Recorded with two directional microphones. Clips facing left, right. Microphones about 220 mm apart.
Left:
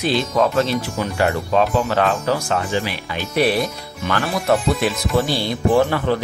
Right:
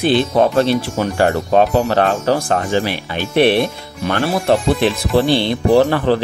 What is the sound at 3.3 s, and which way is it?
Speech, 25° right (ahead or behind).